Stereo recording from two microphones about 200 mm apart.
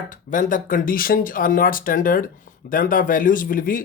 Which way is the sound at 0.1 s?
40° left (ahead or behind).